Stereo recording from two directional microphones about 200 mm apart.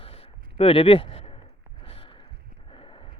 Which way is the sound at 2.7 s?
25° left (ahead or behind).